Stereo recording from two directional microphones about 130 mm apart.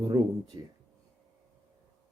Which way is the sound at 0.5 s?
35° right (ahead or behind).